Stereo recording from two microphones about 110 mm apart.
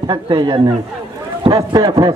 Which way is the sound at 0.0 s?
45° right (ahead or behind).